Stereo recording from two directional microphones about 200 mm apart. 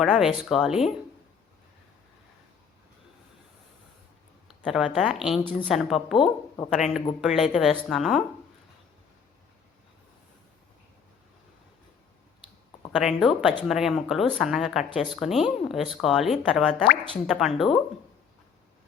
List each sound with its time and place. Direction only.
0.0 s speech: centre (ahead or behind)
4.4 s a sound: centre (ahead or behind)
4.9 s speech: centre (ahead or behind)
12.9 s speech: centre (ahead or behind)